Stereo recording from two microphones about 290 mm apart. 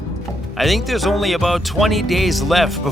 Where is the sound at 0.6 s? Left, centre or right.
Centre.